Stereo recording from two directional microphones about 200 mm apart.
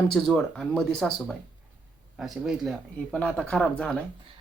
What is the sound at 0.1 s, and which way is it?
Speech, 5° left (ahead or behind).